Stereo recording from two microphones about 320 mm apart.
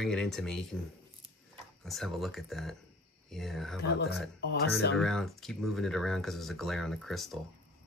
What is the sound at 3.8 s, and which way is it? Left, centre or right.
Speech, left.